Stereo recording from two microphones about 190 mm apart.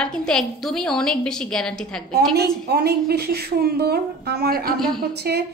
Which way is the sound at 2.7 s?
55° right (ahead or behind).